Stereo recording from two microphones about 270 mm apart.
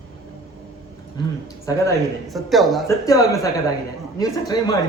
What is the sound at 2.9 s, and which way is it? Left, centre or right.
Speech, centre.